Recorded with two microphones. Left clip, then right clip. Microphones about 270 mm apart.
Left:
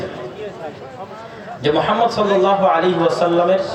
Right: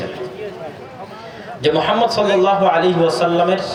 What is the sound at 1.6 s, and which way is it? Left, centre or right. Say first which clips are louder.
A man's voice: right 1 dB; right.